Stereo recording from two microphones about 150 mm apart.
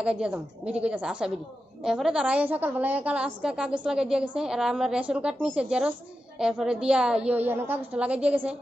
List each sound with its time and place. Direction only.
0.0 s a woman's voice: 5° right (ahead or behind)